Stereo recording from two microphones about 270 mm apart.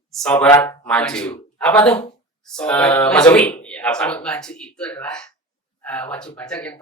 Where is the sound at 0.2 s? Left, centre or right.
Centre.